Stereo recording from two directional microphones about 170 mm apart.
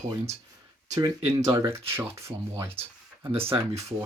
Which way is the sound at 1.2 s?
40° right (ahead or behind).